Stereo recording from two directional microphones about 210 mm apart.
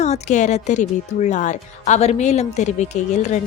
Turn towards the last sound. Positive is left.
turn(degrees=35)  # may be behind; listen again after turning